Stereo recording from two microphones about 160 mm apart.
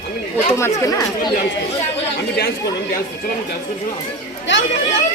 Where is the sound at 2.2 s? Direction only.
90° left.